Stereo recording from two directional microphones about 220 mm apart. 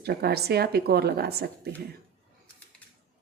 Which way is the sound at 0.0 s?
45° right (ahead or behind).